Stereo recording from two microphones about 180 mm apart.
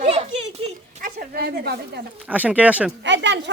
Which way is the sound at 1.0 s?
55° right (ahead or behind).